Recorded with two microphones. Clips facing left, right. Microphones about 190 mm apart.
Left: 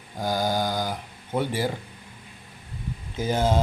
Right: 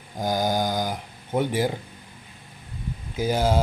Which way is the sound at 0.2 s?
15° right (ahead or behind).